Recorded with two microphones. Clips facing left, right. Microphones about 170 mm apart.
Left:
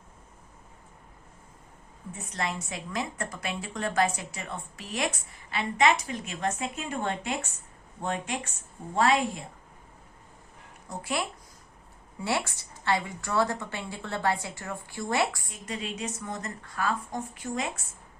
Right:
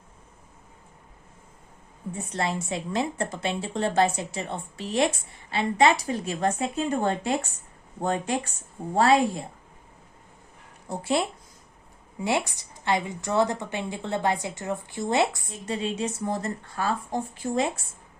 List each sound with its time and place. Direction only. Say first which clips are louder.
2.1 s a woman's voice: right 4 dB; 30° right (ahead or behind)
10.8 s speech: right 6 dB; 25° right (ahead or behind)
12.2 s a woman's voice: right 4 dB; 15° right (ahead or behind)